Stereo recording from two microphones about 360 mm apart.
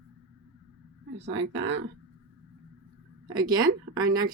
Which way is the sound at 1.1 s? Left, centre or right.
Right.